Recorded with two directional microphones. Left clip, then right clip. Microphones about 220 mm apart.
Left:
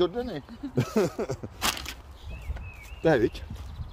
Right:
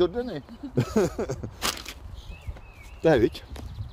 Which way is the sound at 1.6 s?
10° left (ahead or behind).